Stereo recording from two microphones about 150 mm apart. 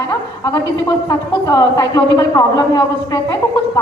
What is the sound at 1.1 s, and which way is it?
A woman's voice, 25° left (ahead or behind).